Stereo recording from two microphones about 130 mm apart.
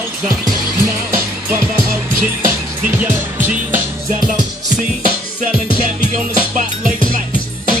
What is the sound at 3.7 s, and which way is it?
Music, 90° right.